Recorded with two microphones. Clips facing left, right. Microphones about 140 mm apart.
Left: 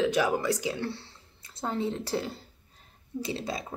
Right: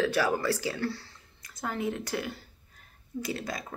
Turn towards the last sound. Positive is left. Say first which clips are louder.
# left 1 dB
turn(degrees=25)  # may be behind; listen again after turning